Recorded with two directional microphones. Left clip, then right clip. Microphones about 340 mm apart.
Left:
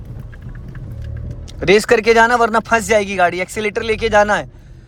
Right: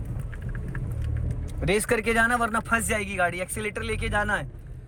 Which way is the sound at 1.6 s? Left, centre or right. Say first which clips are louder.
Left 13 dB; centre.